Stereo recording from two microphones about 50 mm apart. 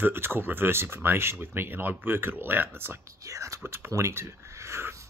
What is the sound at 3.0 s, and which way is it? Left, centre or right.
Speech, right.